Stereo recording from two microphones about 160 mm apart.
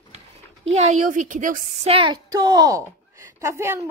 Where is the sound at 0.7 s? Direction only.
45° right (ahead or behind).